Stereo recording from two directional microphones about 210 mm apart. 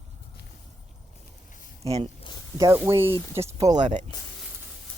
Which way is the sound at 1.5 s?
40° left (ahead or behind).